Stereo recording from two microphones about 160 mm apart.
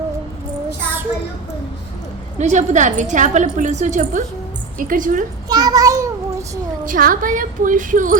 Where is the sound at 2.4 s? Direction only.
50° right (ahead or behind).